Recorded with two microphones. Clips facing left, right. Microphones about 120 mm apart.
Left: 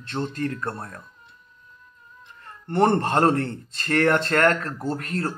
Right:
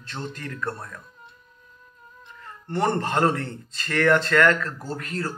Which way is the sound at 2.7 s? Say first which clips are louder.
Left 4 dB; 35° left (ahead or behind).